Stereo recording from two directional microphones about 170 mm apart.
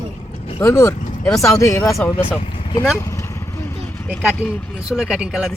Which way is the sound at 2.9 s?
20° left (ahead or behind).